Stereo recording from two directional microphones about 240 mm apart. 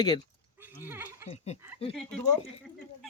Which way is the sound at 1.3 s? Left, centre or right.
Left.